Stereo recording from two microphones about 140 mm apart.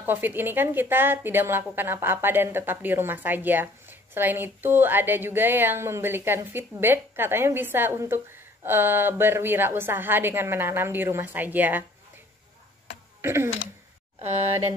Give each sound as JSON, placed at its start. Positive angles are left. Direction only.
{"t": 0.0, "sound": "a woman's voice", "side_deg": -15}
{"t": 13.2, "sound": "speech", "side_deg": -15}